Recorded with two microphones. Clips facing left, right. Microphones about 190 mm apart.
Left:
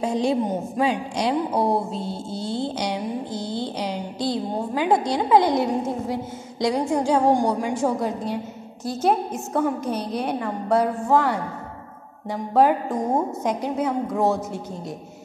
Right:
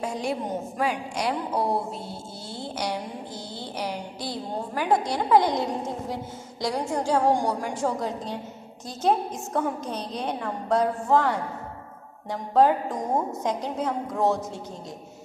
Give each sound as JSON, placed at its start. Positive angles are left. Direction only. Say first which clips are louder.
{"t": 0.0, "sound": "a woman's voice", "louder": "left 7 dB", "side_deg": 25}
{"t": 2.4, "sound": "a sound", "louder": "left 5 dB", "side_deg": 20}
{"t": 5.1, "sound": "a woman's voice", "louder": "left 2 dB", "side_deg": 15}
{"t": 7.8, "sound": "a woman's voice", "louder": "left 4 dB", "side_deg": 10}